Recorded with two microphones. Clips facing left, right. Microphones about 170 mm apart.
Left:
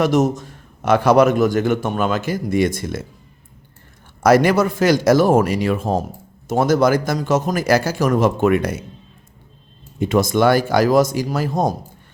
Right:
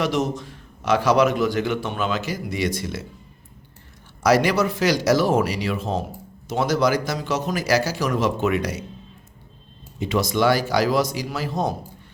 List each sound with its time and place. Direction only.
0.0 s a man's voice: 45° left (ahead or behind)
4.2 s a man's voice: 50° left (ahead or behind)
10.0 s a man's voice: 50° left (ahead or behind)